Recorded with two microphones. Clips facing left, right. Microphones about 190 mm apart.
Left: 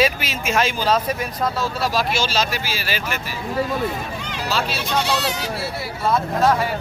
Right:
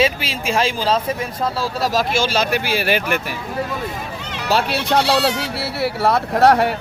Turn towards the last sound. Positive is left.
turn(degrees=-65)  # may be behind; listen again after turning